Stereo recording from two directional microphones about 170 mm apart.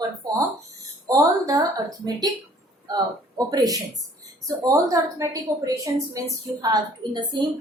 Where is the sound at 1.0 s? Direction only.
20° right (ahead or behind).